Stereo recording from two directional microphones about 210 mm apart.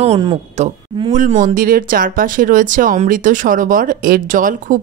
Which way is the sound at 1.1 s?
35° right (ahead or behind).